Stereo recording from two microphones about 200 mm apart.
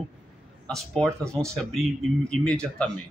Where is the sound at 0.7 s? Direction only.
Centre (ahead or behind).